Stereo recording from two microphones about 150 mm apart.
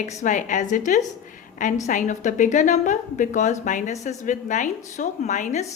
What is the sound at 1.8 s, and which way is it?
A woman's voice, 55° left (ahead or behind).